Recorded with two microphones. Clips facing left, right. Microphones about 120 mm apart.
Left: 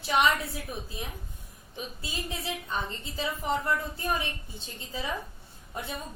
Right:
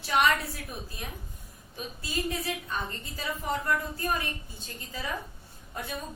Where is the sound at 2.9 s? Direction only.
20° left (ahead or behind).